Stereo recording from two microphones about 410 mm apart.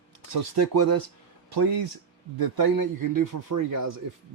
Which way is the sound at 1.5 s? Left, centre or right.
Right.